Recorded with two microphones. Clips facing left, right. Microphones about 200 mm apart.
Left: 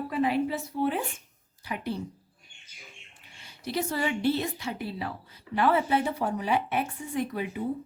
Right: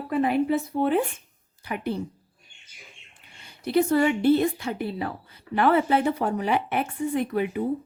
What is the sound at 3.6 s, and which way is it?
Speech, 55° right (ahead or behind).